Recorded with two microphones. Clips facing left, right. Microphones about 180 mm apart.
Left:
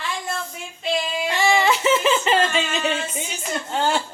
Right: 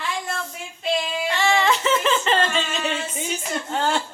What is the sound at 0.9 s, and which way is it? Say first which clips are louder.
Singing: left 2 dB; 5° left (ahead or behind).